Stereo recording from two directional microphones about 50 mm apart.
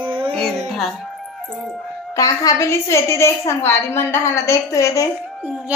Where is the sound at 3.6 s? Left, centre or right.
Left.